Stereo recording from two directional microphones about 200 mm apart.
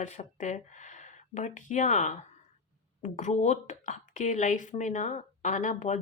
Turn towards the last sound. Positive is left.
turn(degrees=35)  # may be behind; listen again after turning